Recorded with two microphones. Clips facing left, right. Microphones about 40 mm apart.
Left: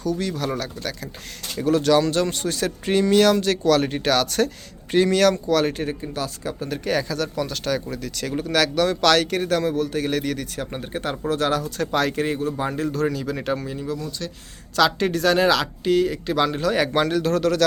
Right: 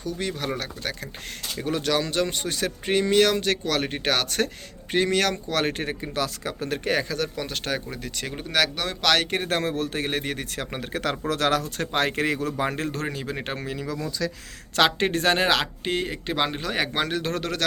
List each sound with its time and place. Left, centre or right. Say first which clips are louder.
0.2 s speech: left 3 dB; right
5.6 s speech: left 3 dB; right
6.8 s speech: left 2 dB; right
9.2 s speech: left 4 dB; right
10.1 s speech: left 4 dB; right
10.6 s speech: left 1 dB; right
11.3 s speech: left 2 dB; right
11.9 s speech: left 2 dB; right
12.1 s speech: left 1 dB; right
13.1 s speech: left 6 dB; right
13.7 s speech: left 2 dB; right
14.8 s speech: left 2 dB; right